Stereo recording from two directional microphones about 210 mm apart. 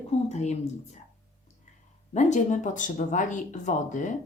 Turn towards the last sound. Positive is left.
turn(degrees=35)  # may be behind; listen again after turning